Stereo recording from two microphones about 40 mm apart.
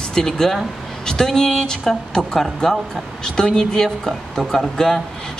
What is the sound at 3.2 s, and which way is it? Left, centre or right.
A man's voice, centre.